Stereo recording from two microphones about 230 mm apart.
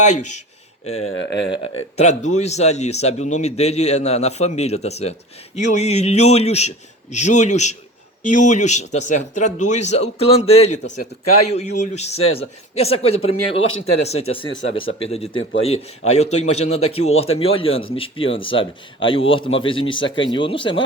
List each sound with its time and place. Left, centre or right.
0.0 s speech: left
1.5 s a man's voice: left
11.8 s a man's voice: left
14.5 s speech: left
15.0 s a man's voice: left